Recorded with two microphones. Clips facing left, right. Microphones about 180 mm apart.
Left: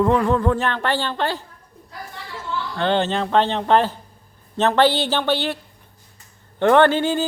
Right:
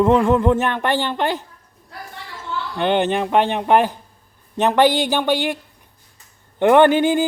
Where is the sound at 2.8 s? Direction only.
15° right (ahead or behind).